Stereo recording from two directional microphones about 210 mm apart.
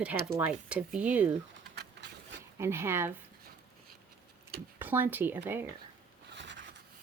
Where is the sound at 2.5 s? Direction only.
10° right (ahead or behind).